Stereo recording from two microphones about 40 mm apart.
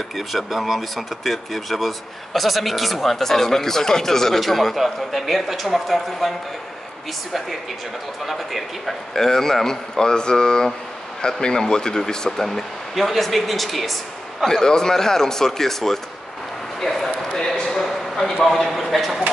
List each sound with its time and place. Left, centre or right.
0.1 s speech: centre
8.3 s a man's voice: centre
14.4 s a man's voice: centre
17.6 s a sound: centre
18.4 s a man's voice: centre